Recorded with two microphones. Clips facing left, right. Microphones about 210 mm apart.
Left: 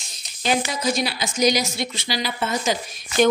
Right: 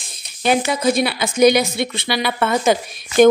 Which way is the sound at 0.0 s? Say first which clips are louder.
Right 6 dB; 55° right (ahead or behind).